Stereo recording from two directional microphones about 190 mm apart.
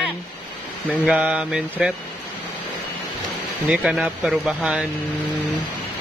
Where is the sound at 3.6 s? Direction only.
5° right (ahead or behind).